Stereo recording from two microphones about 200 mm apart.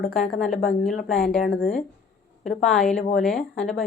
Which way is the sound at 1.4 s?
45° left (ahead or behind).